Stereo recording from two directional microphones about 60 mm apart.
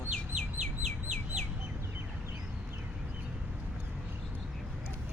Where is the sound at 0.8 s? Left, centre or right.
Right.